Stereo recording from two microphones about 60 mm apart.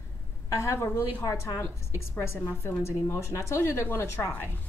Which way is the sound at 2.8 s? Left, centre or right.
Left.